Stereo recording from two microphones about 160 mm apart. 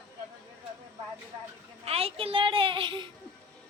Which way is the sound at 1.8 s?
40° right (ahead or behind).